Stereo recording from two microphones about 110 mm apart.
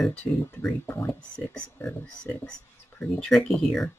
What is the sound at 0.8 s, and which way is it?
Speech, 20° left (ahead or behind).